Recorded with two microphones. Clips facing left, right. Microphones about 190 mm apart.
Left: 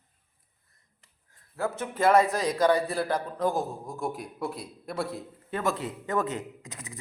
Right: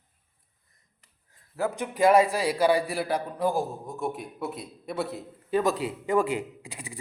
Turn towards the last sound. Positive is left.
turn(degrees=-10)  # may be behind; listen again after turning